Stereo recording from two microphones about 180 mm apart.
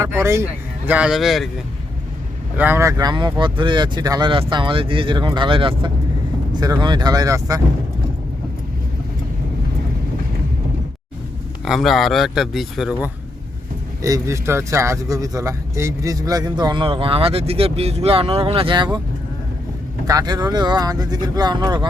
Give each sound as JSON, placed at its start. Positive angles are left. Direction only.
{"t": 0.0, "sound": "a man's voice", "side_deg": -15}
{"t": 2.6, "sound": "speech", "side_deg": -10}
{"t": 11.6, "sound": "a man's voice", "side_deg": 0}
{"t": 14.0, "sound": "speech", "side_deg": -15}
{"t": 20.1, "sound": "speech", "side_deg": -20}